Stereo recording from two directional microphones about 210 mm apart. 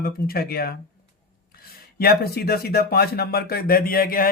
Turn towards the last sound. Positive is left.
turn(degrees=45)  # may be behind; listen again after turning